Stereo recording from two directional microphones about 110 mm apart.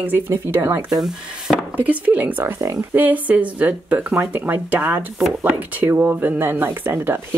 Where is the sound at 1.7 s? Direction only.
15° right (ahead or behind).